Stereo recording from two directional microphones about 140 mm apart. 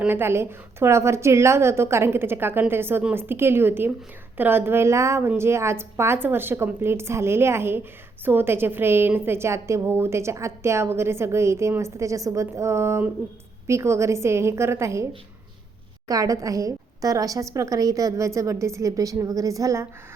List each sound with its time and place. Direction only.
0.0 s a woman's voice: 15° right (ahead or behind)
16.0 s a woman's voice: 25° right (ahead or behind)